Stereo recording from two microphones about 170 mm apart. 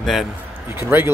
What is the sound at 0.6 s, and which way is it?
Speech, 10° right (ahead or behind).